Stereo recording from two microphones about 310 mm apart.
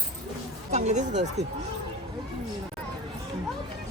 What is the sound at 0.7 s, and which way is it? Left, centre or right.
Speech, right.